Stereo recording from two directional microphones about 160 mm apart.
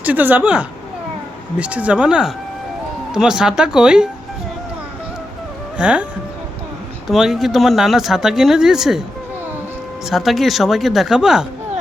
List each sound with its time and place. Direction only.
0.0 s speech: 10° right (ahead or behind)
5.7 s speech: 5° right (ahead or behind)
7.1 s speech: centre (ahead or behind)
10.1 s speech: centre (ahead or behind)